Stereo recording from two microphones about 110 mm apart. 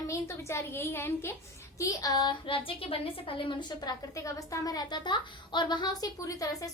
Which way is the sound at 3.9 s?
30° left (ahead or behind).